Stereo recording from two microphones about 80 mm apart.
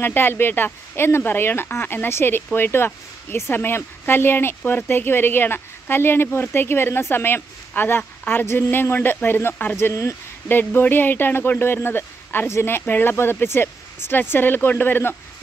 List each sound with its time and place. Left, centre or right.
0.0 s speech: left
10.5 s speech: left